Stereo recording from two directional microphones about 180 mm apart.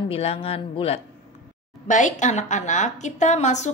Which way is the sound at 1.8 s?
45° left (ahead or behind).